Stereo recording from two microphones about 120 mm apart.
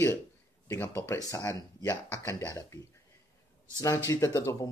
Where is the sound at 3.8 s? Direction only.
25° left (ahead or behind).